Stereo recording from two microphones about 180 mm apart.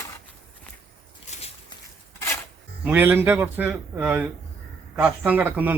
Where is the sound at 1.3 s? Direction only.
40° left (ahead or behind).